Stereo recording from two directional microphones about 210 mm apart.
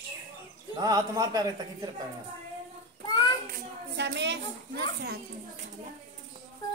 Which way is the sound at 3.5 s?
55° right (ahead or behind).